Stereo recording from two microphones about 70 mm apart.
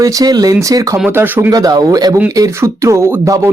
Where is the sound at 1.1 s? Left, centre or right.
Right.